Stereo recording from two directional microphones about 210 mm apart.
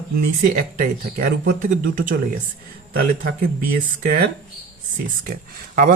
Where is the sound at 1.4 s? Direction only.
40° right (ahead or behind).